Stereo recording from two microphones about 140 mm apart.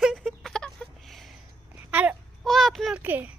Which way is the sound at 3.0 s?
10° right (ahead or behind).